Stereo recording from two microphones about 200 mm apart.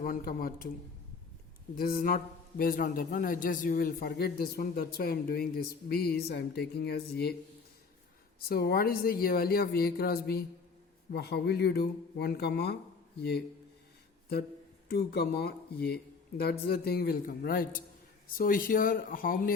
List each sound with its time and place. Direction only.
0.0 s a man's voice: 45° left (ahead or behind)
1.8 s a man's voice: 50° left (ahead or behind)
8.4 s a man's voice: 50° left (ahead or behind)
14.8 s a man's voice: 55° left (ahead or behind)